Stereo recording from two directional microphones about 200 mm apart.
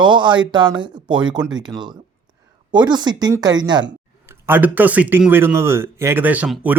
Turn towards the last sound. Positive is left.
turn(degrees=-5)  # may be behind; listen again after turning